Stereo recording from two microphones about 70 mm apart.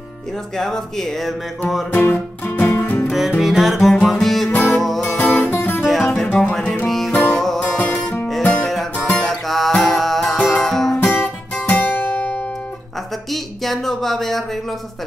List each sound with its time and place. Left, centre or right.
0.6 s music: centre
1.9 s music: left
3.1 s music: centre
4.5 s music: left
4.7 s music: centre
5.6 s music: left
5.9 s music: centre
7.7 s music: left
9.2 s music: centre
11.0 s music: left
13.3 s a sound: centre